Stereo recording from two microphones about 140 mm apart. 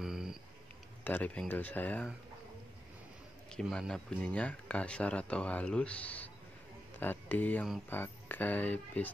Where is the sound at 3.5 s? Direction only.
5° left (ahead or behind).